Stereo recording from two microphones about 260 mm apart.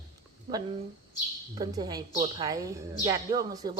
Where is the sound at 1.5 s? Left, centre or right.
Centre.